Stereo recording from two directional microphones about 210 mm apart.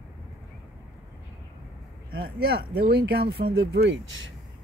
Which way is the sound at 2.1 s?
45° right (ahead or behind).